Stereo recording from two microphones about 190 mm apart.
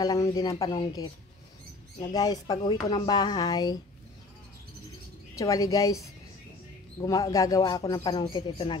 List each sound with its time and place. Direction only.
0.0 s speech: 20° left (ahead or behind)
5.3 s a woman's voice: 15° left (ahead or behind)